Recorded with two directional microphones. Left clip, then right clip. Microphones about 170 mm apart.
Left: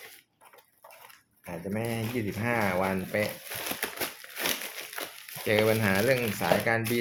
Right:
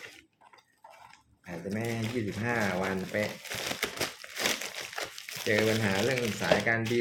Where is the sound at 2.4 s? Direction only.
70° left (ahead or behind).